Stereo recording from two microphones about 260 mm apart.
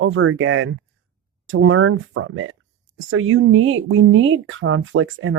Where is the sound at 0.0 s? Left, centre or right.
Right.